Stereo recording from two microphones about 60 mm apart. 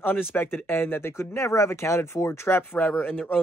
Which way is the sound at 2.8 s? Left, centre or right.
Left.